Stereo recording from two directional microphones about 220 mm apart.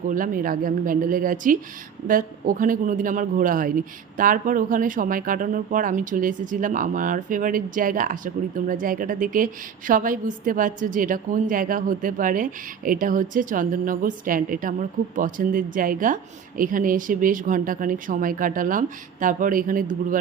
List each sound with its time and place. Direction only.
0.1 s a man's voice: 40° right (ahead or behind)